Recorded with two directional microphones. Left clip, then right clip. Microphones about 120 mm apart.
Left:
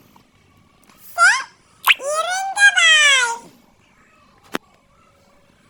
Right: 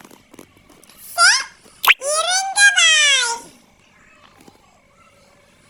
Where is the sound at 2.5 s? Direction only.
30° right (ahead or behind).